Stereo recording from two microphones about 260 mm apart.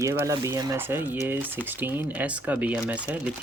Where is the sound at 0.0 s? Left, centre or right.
Centre.